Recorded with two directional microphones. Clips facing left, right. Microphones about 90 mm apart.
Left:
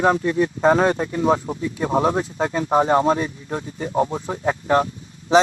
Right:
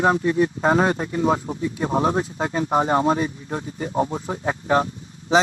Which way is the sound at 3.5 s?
20° right (ahead or behind).